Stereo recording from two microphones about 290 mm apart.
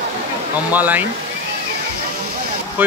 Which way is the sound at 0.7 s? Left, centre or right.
Centre.